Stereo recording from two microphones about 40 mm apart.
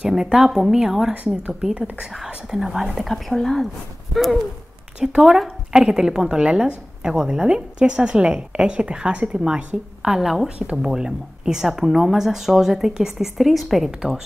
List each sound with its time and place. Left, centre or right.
0.1 s speech: centre
2.7 s speech: centre
4.1 s a sound: centre
5.0 s a woman's voice: centre; by 9.4 s right
9.4 s speech: centre
13.4 s speech: centre
13.8 s speech: centre